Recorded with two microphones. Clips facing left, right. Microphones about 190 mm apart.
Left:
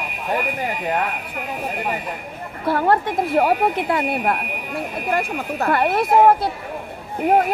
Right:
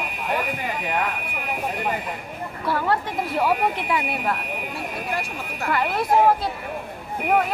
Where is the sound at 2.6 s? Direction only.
50° left (ahead or behind).